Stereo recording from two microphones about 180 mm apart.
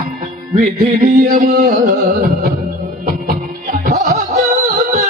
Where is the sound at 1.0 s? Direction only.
40° right (ahead or behind).